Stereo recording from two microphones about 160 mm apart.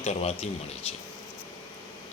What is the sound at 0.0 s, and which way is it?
Speech, 45° left (ahead or behind).